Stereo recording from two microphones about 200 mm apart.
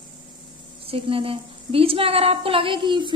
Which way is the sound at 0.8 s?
25° right (ahead or behind).